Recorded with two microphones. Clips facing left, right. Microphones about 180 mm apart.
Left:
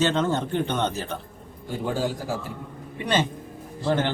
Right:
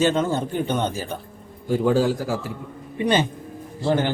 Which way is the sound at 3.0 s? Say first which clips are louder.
Right 4 dB; 15° right (ahead or behind).